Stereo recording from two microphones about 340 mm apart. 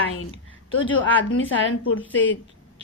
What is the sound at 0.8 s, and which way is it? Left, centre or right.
A woman's voice, left.